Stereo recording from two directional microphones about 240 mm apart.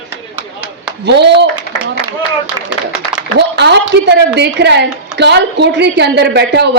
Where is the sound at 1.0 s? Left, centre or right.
Right.